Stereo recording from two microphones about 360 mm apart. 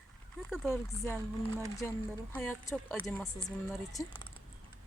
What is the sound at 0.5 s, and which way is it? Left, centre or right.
Speech, centre.